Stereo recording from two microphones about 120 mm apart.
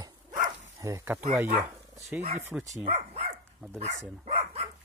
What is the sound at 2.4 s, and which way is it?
Speech, 20° right (ahead or behind).